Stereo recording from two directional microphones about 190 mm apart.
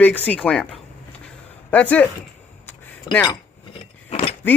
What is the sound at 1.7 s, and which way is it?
Speech, 10° left (ahead or behind).